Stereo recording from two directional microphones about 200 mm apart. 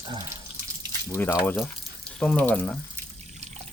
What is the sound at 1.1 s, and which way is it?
Speech, 10° left (ahead or behind).